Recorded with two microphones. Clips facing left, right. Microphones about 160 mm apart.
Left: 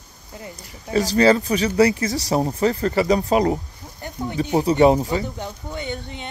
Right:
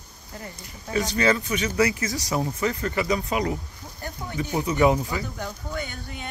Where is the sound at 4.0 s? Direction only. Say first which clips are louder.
Left 6 dB; 20° left (ahead or behind).